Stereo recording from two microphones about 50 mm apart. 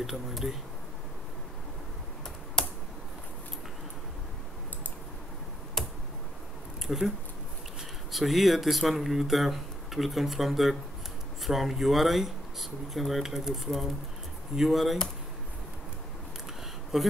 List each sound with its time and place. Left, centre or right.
0.0 s speech: centre
2.6 s computer keyboard: centre
5.8 s a sound: centre
6.9 s speech: centre
8.1 s speech: centre
16.9 s speech: centre